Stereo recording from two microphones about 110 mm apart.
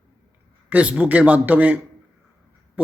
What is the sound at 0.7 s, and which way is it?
Speech, 10° right (ahead or behind).